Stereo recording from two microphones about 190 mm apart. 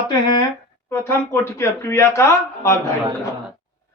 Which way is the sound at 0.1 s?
25° left (ahead or behind).